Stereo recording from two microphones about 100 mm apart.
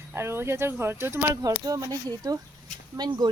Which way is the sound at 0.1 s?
25° right (ahead or behind).